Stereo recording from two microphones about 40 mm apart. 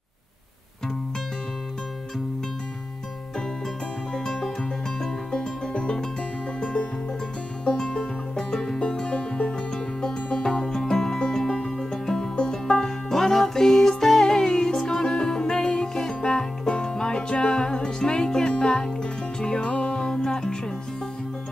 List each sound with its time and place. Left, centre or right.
4.1 s music: left
7.6 s music: left
10.7 s music: centre
19.7 s music: left
20.1 s music: centre